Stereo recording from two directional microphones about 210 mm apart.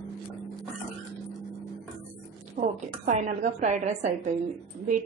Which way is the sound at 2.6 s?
35° right (ahead or behind).